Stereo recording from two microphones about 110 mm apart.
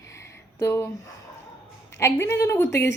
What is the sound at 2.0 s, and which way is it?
Speech, 25° left (ahead or behind).